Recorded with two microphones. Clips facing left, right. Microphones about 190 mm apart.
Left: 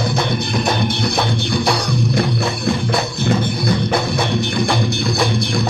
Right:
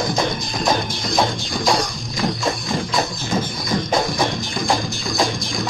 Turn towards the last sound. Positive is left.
turn(degrees=65)  # may be behind; listen again after turning